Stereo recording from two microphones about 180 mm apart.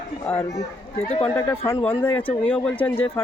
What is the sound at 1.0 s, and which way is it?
Speech, 35° left (ahead or behind).